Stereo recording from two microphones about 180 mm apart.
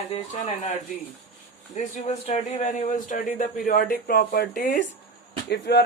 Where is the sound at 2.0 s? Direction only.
40° left (ahead or behind); by 5.8 s 65° left (ahead or behind).